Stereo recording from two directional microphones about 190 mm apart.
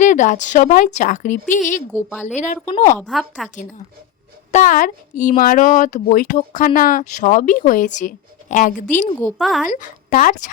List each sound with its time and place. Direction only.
0.0 s a woman's voice: 40° left (ahead or behind)
3.0 s a woman's voice: centre (ahead or behind)
4.5 s speech: 45° left (ahead or behind)
9.4 s a woman's voice: centre (ahead or behind)
9.6 s speech: 45° left (ahead or behind)